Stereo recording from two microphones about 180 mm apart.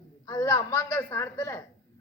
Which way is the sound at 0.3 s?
20° left (ahead or behind).